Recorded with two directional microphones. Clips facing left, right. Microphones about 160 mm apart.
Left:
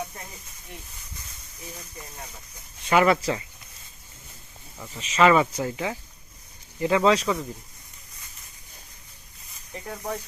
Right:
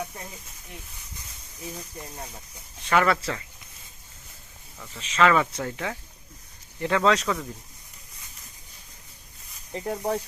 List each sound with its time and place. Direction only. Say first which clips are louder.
2.9 s speech: left 3 dB; 15° left (ahead or behind)
4.8 s speech: left 2 dB; 10° left (ahead or behind)
9.7 s speech: right 5 dB; 30° right (ahead or behind)